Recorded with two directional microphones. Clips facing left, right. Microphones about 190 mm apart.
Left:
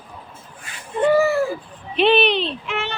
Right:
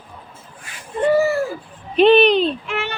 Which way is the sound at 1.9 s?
40° right (ahead or behind).